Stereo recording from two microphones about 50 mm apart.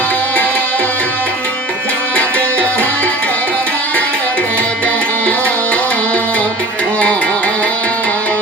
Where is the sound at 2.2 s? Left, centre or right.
Left.